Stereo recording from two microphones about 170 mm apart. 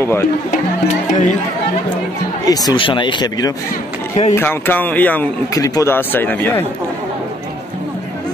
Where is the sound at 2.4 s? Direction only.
20° left (ahead or behind).